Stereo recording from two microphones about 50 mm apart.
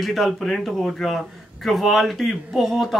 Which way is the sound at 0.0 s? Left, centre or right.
Centre.